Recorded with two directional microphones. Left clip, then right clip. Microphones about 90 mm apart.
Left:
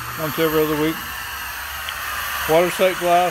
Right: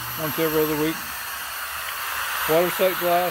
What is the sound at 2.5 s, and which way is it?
Speech, centre (ahead or behind).